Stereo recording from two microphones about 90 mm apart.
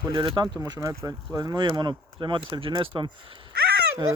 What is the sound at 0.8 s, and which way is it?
Speech, 35° right (ahead or behind).